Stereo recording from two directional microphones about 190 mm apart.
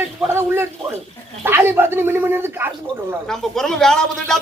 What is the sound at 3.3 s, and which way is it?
Speech, 5° left (ahead or behind).